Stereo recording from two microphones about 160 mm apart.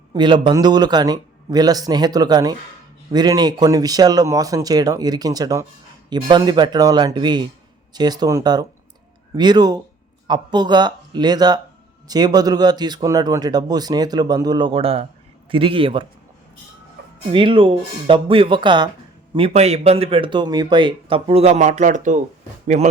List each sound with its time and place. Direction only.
0.1 s speech: 30° right (ahead or behind)
17.3 s speech: 30° right (ahead or behind); by 22.9 s 50° right (ahead or behind)